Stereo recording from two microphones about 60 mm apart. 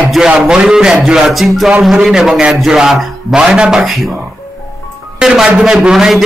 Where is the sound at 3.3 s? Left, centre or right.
Centre.